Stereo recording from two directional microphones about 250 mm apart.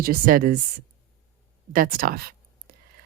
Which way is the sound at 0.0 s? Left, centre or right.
Right.